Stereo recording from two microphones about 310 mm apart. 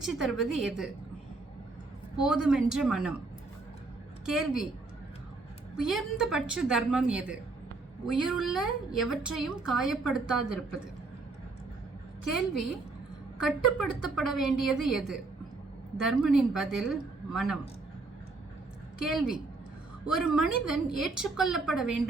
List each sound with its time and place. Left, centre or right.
0.0 s a woman's voice: centre
2.2 s a woman's voice: centre
4.3 s a woman's voice: centre
5.7 s a woman's voice: centre
13.4 s a woman's voice: centre
19.0 s a woman's voice: centre